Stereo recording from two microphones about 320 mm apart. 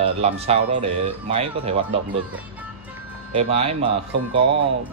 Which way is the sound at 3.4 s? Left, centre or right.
Centre.